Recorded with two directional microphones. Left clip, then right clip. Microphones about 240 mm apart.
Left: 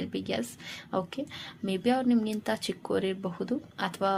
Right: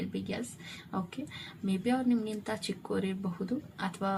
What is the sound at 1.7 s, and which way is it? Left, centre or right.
A woman's voice, left.